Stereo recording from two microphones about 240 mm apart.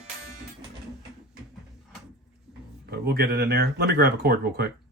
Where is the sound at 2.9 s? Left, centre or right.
Right.